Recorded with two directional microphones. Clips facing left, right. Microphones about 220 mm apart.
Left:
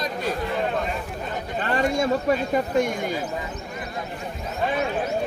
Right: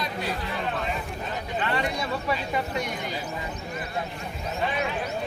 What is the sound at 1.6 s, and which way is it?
Speech, 45° left (ahead or behind).